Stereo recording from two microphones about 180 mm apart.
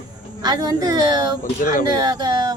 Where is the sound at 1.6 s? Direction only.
50° left (ahead or behind).